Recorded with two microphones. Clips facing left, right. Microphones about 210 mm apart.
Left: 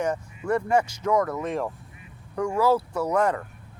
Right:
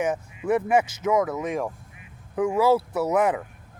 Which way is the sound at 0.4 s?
5° right (ahead or behind).